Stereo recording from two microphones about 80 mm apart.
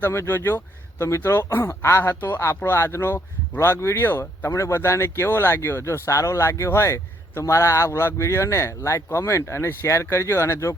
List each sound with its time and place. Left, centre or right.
0.0 s speech: left